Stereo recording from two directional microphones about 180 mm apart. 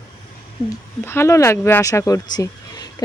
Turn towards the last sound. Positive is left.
turn(degrees=20)  # may be behind; listen again after turning